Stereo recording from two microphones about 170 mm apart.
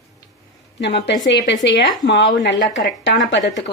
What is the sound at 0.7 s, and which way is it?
Speech, 90° left.